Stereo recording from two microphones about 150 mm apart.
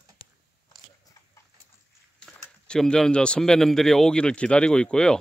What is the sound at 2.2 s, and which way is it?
Speech, 5° left (ahead or behind).